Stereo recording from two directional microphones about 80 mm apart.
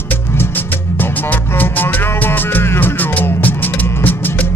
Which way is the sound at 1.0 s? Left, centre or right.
Left.